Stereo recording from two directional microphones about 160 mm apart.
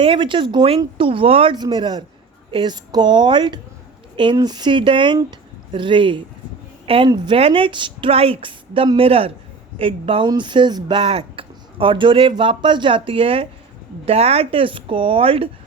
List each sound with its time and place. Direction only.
0.0 s speech: 30° right (ahead or behind)